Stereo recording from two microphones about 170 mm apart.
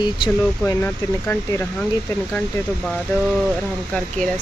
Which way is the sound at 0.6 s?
10° left (ahead or behind).